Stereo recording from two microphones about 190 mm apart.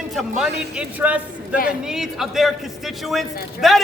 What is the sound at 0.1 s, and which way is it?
A man's voice, centre (ahead or behind).